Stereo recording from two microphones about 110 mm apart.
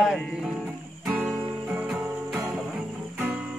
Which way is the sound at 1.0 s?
10° right (ahead or behind).